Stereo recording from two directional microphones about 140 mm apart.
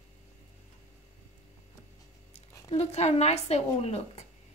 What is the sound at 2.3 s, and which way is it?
Speech, 50° left (ahead or behind).